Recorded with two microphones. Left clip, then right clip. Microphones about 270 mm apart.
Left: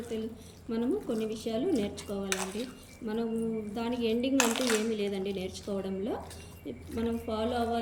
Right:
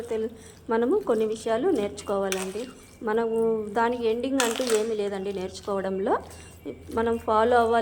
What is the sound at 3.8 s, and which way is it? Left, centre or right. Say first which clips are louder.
Speech: right 8 dB; right.